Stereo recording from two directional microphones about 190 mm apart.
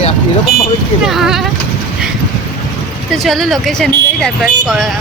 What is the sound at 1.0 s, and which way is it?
Speech, centre (ahead or behind).